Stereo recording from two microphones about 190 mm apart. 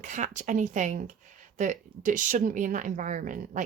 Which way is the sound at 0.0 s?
40° right (ahead or behind).